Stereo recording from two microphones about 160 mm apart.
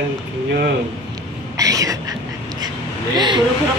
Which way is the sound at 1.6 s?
20° right (ahead or behind).